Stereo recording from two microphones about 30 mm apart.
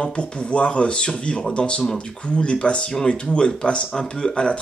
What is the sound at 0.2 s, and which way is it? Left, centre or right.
Speech, left.